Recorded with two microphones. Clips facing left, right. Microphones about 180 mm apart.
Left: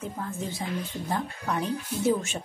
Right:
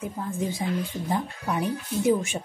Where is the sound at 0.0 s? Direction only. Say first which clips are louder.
Right 4 dB; 15° right (ahead or behind).